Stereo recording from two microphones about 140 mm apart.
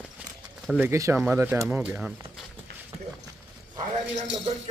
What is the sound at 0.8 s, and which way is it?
Speech, 20° right (ahead or behind).